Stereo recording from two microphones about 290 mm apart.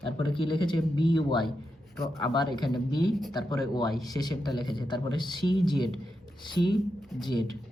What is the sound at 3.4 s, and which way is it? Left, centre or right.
Speech, centre.